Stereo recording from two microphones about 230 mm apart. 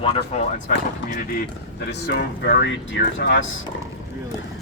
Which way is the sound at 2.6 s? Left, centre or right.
Left.